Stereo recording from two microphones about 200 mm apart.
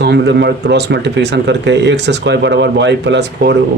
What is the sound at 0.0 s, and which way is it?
Speech, 55° right (ahead or behind).